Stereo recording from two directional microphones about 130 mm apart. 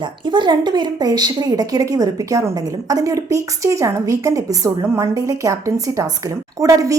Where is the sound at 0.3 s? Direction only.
35° right (ahead or behind).